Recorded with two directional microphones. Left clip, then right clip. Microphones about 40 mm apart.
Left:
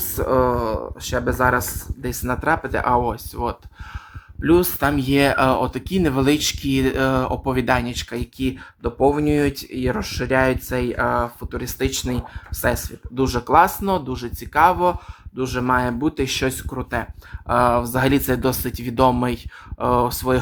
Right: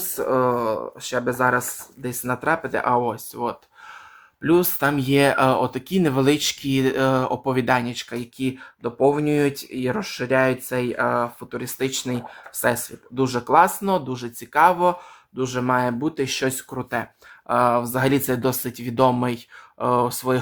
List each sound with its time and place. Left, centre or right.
0.2 s speech: left
0.4 s speech: centre
1.1 s speech: left
1.5 s speech: left
2.2 s speech: left
4.8 s speech: centre
7.9 s speech: left
12.6 s speech: centre
13.1 s speech: centre
15.4 s speech: centre
15.6 s speech: left
16.6 s speech: centre
17.5 s speech: left